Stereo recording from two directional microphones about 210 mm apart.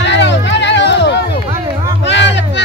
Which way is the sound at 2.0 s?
55° left (ahead or behind).